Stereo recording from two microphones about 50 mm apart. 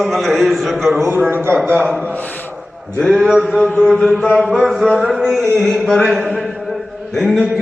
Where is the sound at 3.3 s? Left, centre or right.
Centre.